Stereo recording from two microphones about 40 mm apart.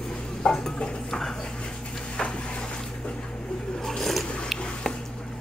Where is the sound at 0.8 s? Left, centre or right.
Centre.